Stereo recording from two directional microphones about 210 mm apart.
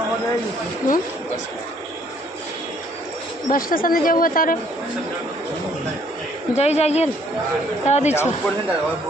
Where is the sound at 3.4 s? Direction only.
40° left (ahead or behind).